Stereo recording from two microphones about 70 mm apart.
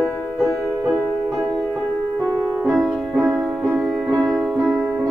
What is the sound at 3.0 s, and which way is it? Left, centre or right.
Music, centre.